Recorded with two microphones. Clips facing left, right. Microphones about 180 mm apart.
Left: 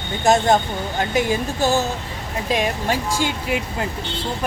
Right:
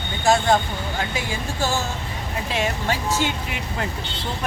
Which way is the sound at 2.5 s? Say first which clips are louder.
Left 3 dB; 10° left (ahead or behind).